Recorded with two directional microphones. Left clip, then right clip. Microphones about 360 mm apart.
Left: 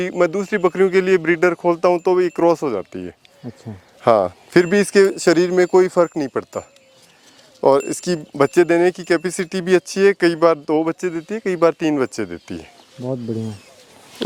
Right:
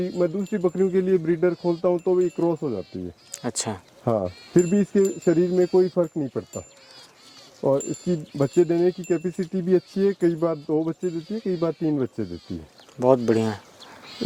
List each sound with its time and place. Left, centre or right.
0.0 s speech: centre
3.7 s speech: centre
4.0 s speech: centre
7.6 s speech: centre
13.0 s speech: centre